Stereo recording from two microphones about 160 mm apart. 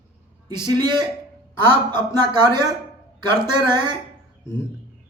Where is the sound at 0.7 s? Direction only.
25° right (ahead or behind).